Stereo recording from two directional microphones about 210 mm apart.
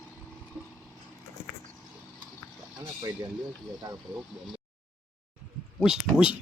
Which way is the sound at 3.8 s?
15° right (ahead or behind).